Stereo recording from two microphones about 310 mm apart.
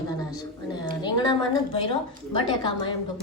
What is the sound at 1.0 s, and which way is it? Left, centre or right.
A woman's voice, centre.